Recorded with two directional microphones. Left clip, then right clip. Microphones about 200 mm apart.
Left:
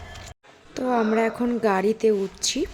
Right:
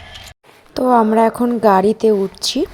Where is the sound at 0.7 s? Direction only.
20° right (ahead or behind).